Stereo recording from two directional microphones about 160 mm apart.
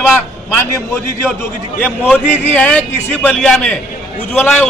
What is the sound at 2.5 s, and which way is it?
A man's voice, 10° left (ahead or behind).